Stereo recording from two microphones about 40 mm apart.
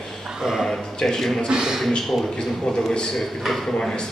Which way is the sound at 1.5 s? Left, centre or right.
Centre.